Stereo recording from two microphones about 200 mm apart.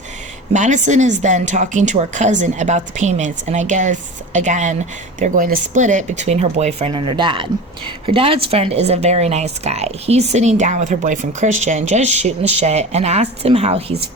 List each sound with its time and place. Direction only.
0.5 s a woman's voice: 35° right (ahead or behind)